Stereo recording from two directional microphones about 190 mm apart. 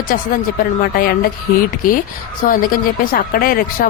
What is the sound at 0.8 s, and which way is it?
Speech, 50° left (ahead or behind).